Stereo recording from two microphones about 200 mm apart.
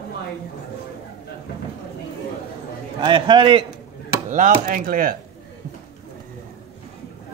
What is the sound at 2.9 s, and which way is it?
Speech, 25° right (ahead or behind).